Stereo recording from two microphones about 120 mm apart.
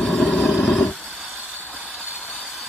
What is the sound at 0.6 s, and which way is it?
Dog, 10° left (ahead or behind).